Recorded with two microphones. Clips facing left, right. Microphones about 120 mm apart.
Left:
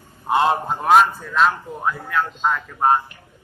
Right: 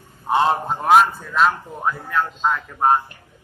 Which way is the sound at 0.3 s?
5° left (ahead or behind).